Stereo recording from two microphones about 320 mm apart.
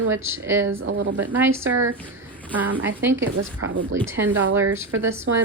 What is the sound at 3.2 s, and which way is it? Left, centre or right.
Speech, right.